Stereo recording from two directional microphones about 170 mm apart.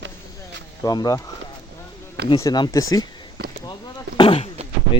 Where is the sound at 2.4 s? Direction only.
20° left (ahead or behind).